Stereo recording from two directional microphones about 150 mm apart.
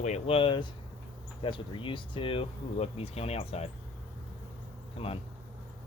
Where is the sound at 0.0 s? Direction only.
45° left (ahead or behind).